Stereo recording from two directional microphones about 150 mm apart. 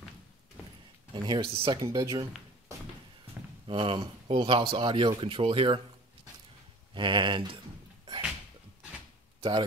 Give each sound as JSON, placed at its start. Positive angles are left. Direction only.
{"t": 1.1, "sound": "speech", "side_deg": -30}
{"t": 1.9, "sound": "speech", "side_deg": -25}
{"t": 3.6, "sound": "speech", "side_deg": -35}
{"t": 6.9, "sound": "speech", "side_deg": -30}
{"t": 9.4, "sound": "speech", "side_deg": -35}